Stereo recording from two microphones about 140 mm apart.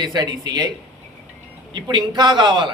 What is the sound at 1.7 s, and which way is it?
A man's voice, 35° right (ahead or behind).